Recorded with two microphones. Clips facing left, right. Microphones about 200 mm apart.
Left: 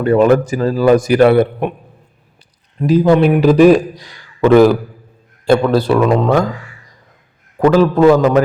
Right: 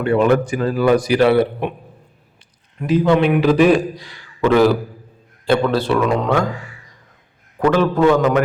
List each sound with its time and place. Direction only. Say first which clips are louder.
0.0 s speech: left 4 dB; 40° left (ahead or behind)
1.0 s a man's voice: left 4 dB; 50° left (ahead or behind)
2.7 s a man's voice: left 4 dB; 35° left (ahead or behind)
7.6 s speech: left 5 dB; 35° left (ahead or behind)